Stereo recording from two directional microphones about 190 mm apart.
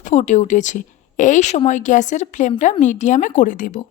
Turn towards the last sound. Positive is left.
turn(degrees=45)  # may be behind; listen again after turning